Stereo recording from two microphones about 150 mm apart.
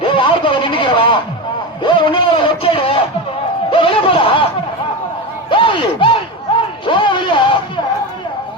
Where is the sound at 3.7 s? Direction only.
35° left (ahead or behind).